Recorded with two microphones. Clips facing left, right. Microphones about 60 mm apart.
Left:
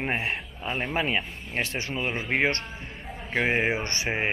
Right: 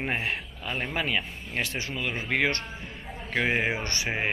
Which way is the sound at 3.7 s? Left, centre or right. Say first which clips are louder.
Left 2 dB; left.